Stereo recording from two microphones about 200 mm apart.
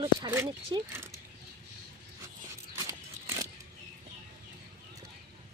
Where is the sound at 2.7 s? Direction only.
15° right (ahead or behind).